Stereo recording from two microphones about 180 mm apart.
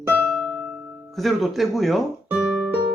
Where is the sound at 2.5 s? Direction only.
5° right (ahead or behind).